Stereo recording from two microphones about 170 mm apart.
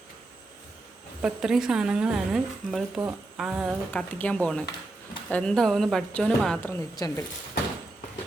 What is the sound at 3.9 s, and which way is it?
A woman's voice, 5° left (ahead or behind).